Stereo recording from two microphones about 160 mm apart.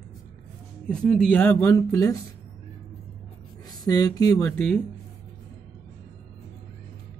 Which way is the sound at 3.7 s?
25° left (ahead or behind).